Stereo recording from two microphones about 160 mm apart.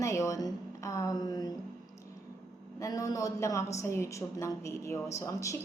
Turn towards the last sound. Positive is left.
turn(degrees=20)  # may be behind; listen again after turning